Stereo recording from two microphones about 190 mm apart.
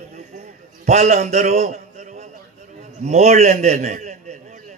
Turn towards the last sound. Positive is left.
turn(degrees=-40)  # may be behind; listen again after turning